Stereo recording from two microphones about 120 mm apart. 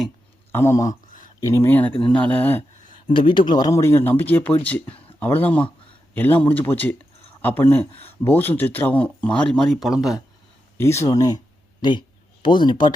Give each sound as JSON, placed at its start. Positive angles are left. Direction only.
{"t": 0.5, "sound": "speech", "side_deg": 25}
{"t": 2.9, "sound": "speech", "side_deg": 45}
{"t": 10.8, "sound": "speech", "side_deg": 20}
{"t": 11.8, "sound": "a sound", "side_deg": 40}